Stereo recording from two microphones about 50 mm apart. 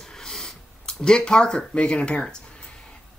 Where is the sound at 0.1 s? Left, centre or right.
Centre.